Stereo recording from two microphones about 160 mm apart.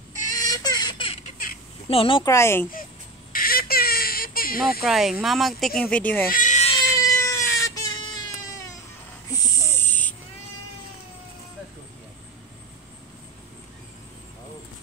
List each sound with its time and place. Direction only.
0.5 s baby laughter: 25° left (ahead or behind)
1.2 s baby laughter: 60° left (ahead or behind)
1.9 s speech: 35° left (ahead or behind)
2.2 s speech: 15° left (ahead or behind)
3.3 s a sound: 65° left (ahead or behind)
4.8 s speech: centre (ahead or behind)
6.3 s cat: 50° left (ahead or behind)
6.7 s cat: 25° left (ahead or behind)
9.3 s a sound: 20° left (ahead or behind)